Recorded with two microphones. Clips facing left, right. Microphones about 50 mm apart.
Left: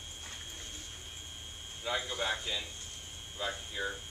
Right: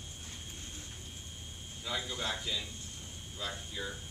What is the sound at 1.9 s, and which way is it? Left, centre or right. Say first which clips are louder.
Speech: left 3 dB; left.